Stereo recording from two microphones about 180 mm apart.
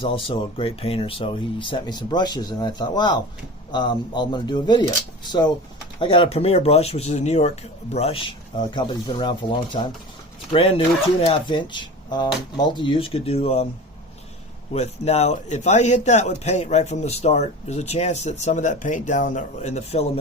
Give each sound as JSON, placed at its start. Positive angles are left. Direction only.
{"t": 0.0, "sound": "speech", "side_deg": 30}
{"t": 6.0, "sound": "a man's voice", "side_deg": 30}
{"t": 14.7, "sound": "a man's voice", "side_deg": 35}